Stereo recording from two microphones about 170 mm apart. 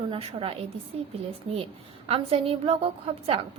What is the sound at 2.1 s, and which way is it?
Speech, 35° right (ahead or behind).